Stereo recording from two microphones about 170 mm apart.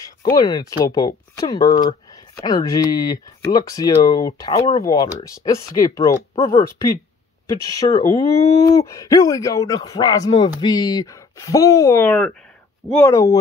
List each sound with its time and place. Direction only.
0.4 s speech: 20° left (ahead or behind); by 13.1 s 5° left (ahead or behind)
13.1 s speech: 20° left (ahead or behind)